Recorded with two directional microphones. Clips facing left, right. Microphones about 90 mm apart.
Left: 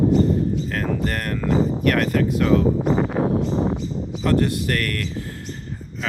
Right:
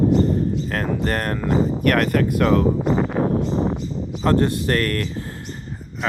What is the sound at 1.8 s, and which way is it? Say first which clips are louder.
Speech: right 1 dB; 50° right (ahead or behind).